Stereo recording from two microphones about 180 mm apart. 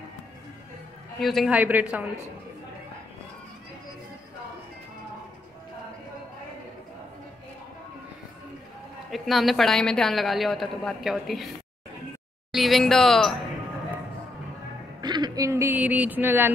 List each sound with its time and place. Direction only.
1.2 s speech: centre (ahead or behind)
9.1 s a woman's voice: centre (ahead or behind)
12.5 s a woman's voice: centre (ahead or behind)
15.0 s speech: 25° right (ahead or behind)